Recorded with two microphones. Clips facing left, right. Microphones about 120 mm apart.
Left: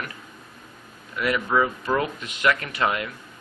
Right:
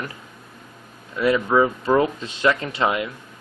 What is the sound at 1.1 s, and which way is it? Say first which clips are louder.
Speech: right 5 dB; 25° right (ahead or behind).